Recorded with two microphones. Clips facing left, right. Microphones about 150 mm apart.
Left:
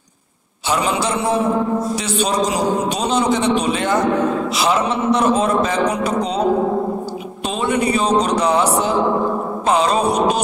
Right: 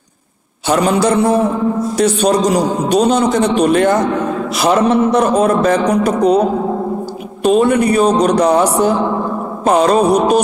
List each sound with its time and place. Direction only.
0.7 s a man's voice: 45° right (ahead or behind)
7.4 s a man's voice: 50° right (ahead or behind)